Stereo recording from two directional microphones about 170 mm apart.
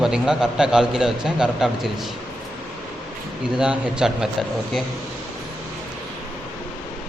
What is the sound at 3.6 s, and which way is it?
Speech, 5° right (ahead or behind).